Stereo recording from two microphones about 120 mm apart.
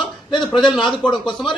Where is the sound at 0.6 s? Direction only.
40° left (ahead or behind).